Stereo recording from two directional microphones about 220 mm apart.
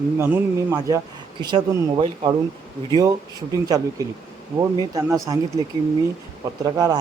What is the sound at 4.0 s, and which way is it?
Speech, 15° right (ahead or behind).